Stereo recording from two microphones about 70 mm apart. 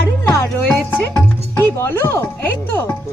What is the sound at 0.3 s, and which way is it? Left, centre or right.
Music, left.